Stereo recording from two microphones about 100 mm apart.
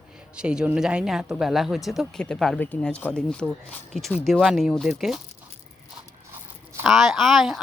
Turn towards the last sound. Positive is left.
turn(degrees=0)  # may be behind; listen again after turning